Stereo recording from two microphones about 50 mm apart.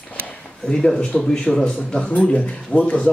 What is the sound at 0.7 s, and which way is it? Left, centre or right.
Speech, centre.